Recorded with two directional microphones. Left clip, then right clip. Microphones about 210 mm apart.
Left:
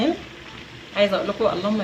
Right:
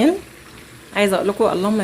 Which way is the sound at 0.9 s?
45° right (ahead or behind).